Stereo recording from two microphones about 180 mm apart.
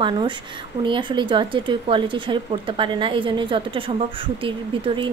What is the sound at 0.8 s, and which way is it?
Speech, 25° right (ahead or behind).